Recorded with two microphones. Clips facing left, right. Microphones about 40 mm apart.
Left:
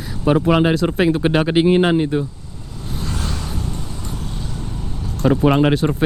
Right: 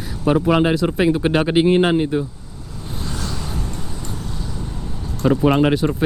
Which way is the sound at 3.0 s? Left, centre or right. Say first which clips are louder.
Left 1 dB; left.